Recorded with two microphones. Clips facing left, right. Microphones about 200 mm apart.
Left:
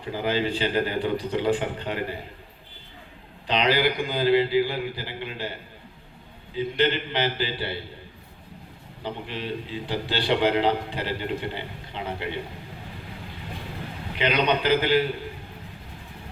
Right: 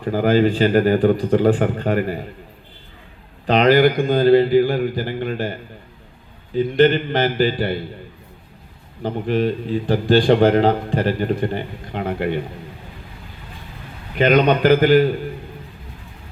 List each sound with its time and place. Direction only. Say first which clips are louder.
0.0 s a man's voice: right 10 dB; 45° right (ahead or behind)
3.4 s a man's voice: right 9 dB; 50° right (ahead or behind)
9.0 s a man's voice: right 12 dB; 45° right (ahead or behind)
14.2 s a man's voice: right 9 dB; 45° right (ahead or behind)